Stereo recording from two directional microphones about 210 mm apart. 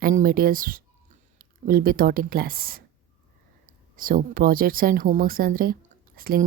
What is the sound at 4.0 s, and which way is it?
Speech, 40° right (ahead or behind).